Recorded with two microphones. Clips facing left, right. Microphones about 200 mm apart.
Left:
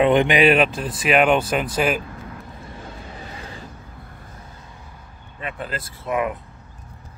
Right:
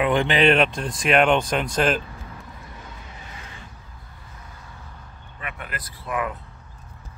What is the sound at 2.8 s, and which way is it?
Vehicle, 30° left (ahead or behind).